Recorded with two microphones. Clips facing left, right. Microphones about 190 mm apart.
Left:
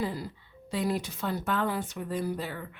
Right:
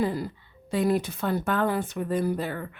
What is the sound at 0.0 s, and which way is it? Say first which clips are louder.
Speech: right 6 dB; 55° right (ahead or behind).